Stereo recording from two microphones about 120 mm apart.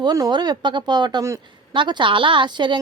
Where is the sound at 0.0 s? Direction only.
35° right (ahead or behind).